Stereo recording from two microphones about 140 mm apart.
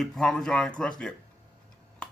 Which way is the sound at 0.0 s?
Centre (ahead or behind).